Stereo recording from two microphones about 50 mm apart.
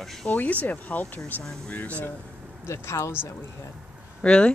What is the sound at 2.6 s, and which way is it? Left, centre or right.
Speech, left.